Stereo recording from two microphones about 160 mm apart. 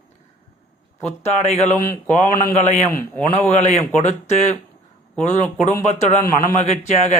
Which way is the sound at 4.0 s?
50° left (ahead or behind).